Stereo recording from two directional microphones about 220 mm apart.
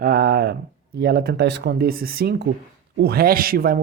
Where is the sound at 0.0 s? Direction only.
45° right (ahead or behind).